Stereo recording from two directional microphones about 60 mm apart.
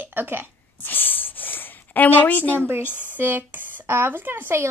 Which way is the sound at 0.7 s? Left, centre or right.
Left.